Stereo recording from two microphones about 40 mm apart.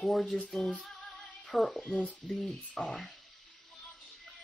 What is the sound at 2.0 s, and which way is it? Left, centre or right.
Stir, left.